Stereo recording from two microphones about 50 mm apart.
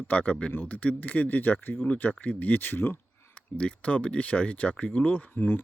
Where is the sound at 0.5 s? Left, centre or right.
Left.